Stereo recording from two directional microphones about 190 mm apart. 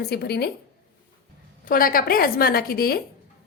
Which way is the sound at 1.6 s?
50° left (ahead or behind).